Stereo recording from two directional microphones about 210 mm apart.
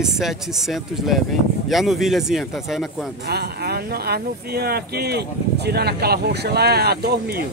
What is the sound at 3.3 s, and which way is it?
Speech, 50° right (ahead or behind).